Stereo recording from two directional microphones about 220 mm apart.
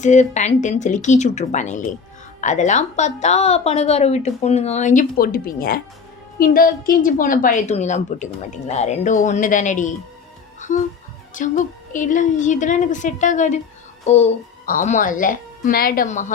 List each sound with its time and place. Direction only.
0.0 s a woman's voice: 35° left (ahead or behind)
11.3 s a woman's voice: 35° left (ahead or behind)